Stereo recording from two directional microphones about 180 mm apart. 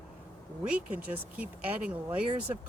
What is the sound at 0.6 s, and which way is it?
Speech, 5° right (ahead or behind).